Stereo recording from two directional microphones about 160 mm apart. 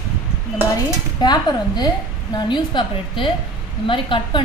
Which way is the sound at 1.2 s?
25° left (ahead or behind).